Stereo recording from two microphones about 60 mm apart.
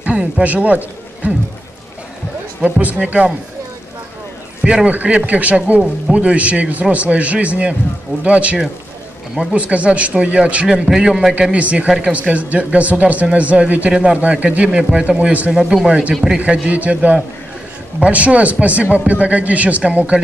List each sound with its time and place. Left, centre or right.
0.0 s a man's voice: right
2.6 s speech: right
4.6 s a man's voice: right
15.5 s a man's voice: centre
15.9 s speech: right